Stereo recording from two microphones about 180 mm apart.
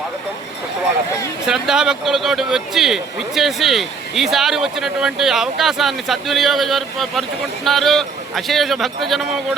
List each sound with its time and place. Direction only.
1.5 s speech: centre (ahead or behind)